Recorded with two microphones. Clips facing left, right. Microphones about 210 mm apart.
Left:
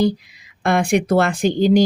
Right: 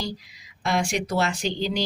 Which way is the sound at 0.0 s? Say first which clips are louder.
Left 14 dB; 55° left (ahead or behind).